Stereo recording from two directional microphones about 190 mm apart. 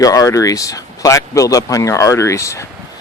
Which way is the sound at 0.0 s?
20° left (ahead or behind).